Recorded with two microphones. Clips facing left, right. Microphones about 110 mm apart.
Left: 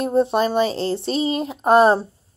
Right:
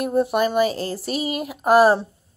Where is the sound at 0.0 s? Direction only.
30° left (ahead or behind).